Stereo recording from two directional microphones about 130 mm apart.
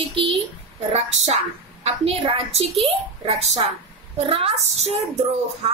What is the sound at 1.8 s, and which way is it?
A woman's voice, 50° right (ahead or behind).